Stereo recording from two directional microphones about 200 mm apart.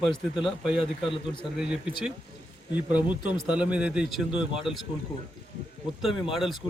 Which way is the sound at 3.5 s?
5° right (ahead or behind).